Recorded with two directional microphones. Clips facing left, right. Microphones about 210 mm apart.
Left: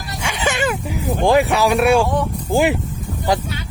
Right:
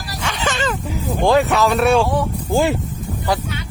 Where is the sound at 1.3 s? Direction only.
15° left (ahead or behind).